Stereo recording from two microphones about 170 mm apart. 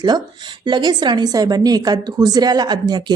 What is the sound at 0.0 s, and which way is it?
A woman's voice, 25° right (ahead or behind).